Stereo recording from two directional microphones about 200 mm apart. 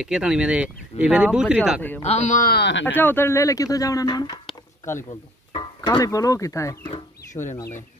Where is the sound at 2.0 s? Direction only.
35° left (ahead or behind); by 2.9 s 65° left (ahead or behind).